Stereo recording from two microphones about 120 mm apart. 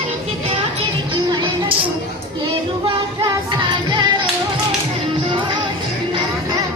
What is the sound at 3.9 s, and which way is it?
Music, 40° right (ahead or behind).